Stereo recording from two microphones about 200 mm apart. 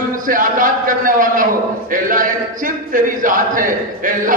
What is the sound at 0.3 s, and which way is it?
A man's voice, 40° right (ahead or behind).